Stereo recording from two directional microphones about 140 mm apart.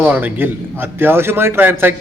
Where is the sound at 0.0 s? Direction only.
15° right (ahead or behind).